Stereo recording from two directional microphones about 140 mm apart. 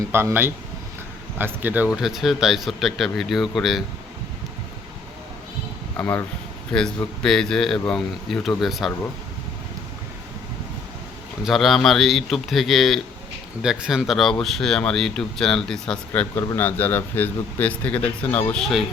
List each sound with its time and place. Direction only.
0.1 s speech: 15° right (ahead or behind); by 3.8 s centre (ahead or behind)
6.0 s speech: 5° left (ahead or behind)
11.4 s speech: centre (ahead or behind)